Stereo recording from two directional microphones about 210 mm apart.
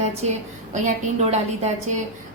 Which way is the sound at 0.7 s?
35° right (ahead or behind).